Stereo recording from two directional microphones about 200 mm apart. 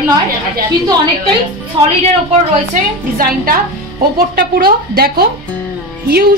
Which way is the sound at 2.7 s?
45° right (ahead or behind).